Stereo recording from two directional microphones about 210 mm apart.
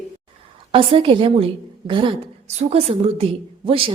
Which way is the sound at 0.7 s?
25° right (ahead or behind).